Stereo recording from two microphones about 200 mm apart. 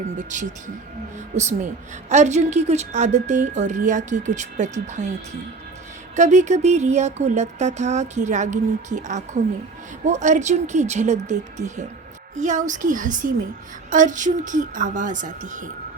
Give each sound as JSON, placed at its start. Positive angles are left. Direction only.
{"t": 0.2, "sound": "a woman's voice", "side_deg": -40}
{"t": 6.1, "sound": "a woman's voice", "side_deg": -35}